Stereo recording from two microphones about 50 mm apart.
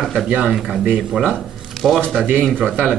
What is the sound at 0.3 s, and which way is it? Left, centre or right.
Speech, centre.